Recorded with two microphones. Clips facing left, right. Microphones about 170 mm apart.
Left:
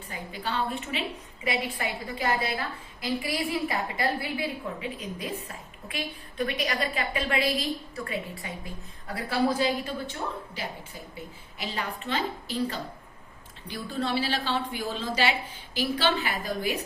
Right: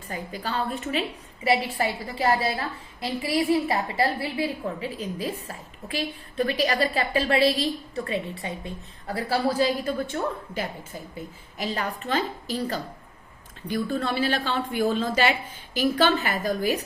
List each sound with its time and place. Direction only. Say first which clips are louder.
0.1 s a woman's voice: right 3 dB; 40° right (ahead or behind)
7.4 s a woman's voice: right 6 dB; centre (ahead or behind)
8.0 s a woman's voice: right 4 dB; 25° right (ahead or behind)
9.1 s a woman's voice: right 2 dB; 45° right (ahead or behind)